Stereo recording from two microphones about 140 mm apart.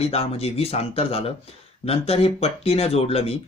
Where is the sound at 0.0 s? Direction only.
50° left (ahead or behind).